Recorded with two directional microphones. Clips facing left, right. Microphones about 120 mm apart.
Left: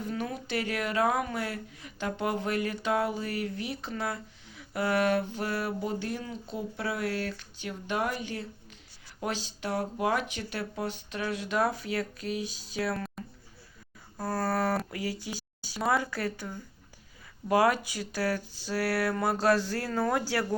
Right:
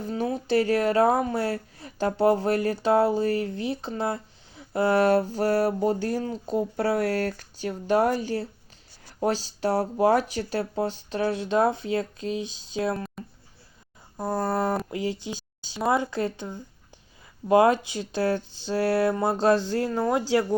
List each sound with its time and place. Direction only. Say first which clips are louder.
0.0 s speech: right 6 dB; 30° right (ahead or behind)
13.2 s a sound: right 2 dB; centre (ahead or behind)
14.2 s speech: right 3 dB; 20° right (ahead or behind)